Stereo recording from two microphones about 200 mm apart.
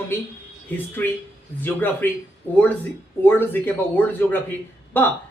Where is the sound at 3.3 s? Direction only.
10° left (ahead or behind).